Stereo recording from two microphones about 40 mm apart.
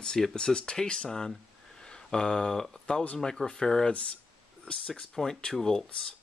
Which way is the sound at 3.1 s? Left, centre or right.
Centre.